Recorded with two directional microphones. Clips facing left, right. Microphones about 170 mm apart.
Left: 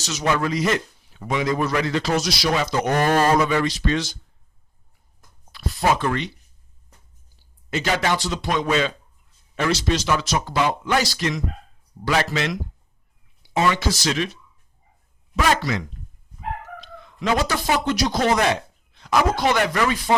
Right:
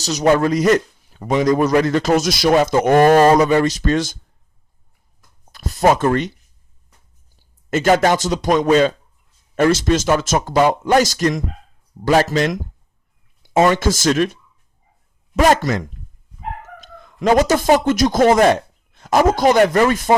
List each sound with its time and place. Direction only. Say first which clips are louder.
0.0 s a man's voice: right 8 dB; 40° right (ahead or behind)
5.5 s speech: right 6 dB; 45° right (ahead or behind)
7.7 s a man's voice: right 8 dB; 50° right (ahead or behind)
15.4 s a man's voice: right 7 dB; 45° right (ahead or behind)